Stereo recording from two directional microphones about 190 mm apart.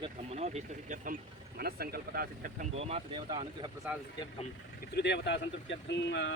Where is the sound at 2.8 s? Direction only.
35° right (ahead or behind).